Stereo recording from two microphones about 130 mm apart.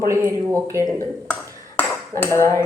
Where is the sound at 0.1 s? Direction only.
20° right (ahead or behind).